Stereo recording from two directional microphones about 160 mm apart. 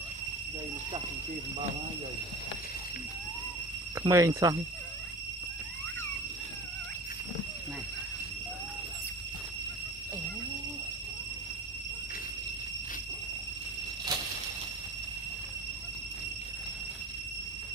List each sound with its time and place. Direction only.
4.0 s speech: 20° right (ahead or behind)